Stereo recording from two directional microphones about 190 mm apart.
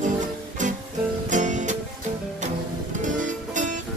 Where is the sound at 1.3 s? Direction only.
40° right (ahead or behind).